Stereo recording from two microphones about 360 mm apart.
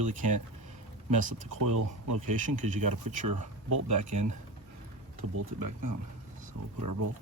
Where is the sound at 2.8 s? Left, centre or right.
Right.